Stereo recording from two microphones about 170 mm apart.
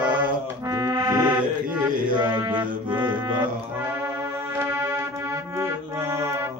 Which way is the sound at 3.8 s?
10° right (ahead or behind).